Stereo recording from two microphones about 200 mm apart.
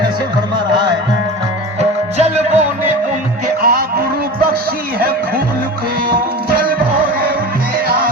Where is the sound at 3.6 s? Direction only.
50° right (ahead or behind).